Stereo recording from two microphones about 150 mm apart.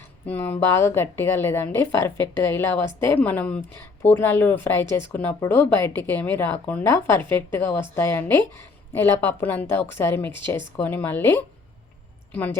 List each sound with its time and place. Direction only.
0.3 s speech: 15° left (ahead or behind)